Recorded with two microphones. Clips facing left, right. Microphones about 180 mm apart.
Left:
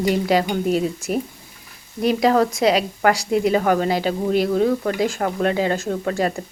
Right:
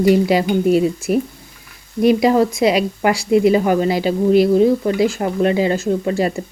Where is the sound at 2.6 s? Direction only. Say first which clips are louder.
Right 2 dB; 40° left (ahead or behind).